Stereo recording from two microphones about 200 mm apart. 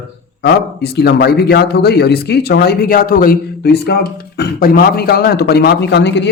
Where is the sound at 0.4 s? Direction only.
50° left (ahead or behind).